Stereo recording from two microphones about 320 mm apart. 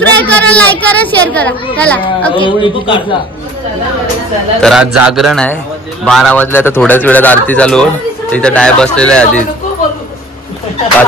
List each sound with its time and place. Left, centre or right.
0.0 s speech: centre
2.3 s a man's voice: centre
4.6 s speech: centre